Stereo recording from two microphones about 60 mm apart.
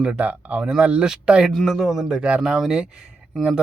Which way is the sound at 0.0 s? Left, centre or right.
Right.